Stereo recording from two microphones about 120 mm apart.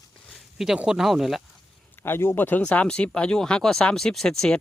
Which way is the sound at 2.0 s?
20° left (ahead or behind).